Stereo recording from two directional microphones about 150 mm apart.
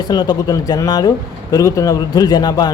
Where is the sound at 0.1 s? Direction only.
25° left (ahead or behind).